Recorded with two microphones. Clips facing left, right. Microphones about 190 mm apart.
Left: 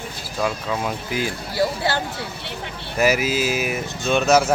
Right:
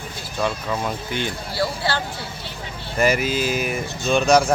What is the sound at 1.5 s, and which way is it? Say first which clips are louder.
Speech: left 3 dB; 15° left (ahead or behind).